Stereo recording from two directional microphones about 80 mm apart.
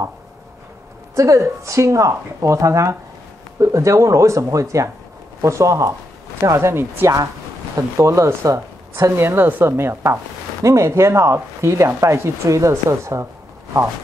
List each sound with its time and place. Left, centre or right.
1.1 s speech: right